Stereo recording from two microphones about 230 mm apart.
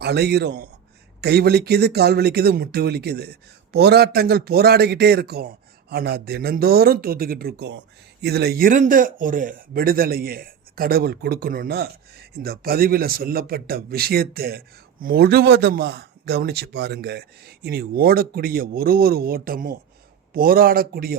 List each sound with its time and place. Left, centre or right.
0.0 s speech: right